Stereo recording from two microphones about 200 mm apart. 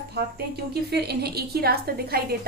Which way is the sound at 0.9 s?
55° right (ahead or behind).